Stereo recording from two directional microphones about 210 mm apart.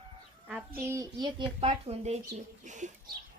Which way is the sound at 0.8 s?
15° right (ahead or behind).